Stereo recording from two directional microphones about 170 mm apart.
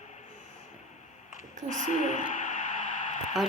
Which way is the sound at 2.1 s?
45° left (ahead or behind).